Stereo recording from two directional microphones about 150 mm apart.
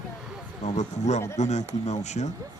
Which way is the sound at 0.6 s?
50° left (ahead or behind).